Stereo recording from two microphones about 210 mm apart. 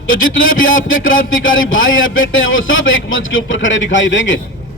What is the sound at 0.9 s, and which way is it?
A man's voice, 70° left (ahead or behind).